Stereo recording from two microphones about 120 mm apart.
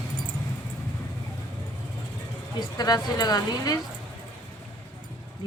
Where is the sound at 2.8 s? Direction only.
35° left (ahead or behind).